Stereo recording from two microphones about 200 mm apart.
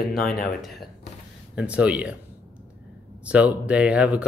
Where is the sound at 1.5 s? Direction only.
5° right (ahead or behind).